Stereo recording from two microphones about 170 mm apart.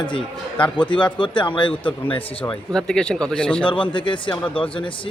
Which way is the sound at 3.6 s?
30° left (ahead or behind).